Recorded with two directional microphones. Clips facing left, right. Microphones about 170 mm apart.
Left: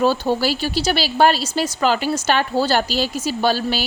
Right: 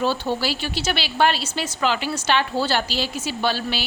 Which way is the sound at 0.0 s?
45° left (ahead or behind).